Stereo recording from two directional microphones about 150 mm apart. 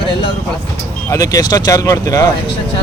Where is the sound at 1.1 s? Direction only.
25° left (ahead or behind).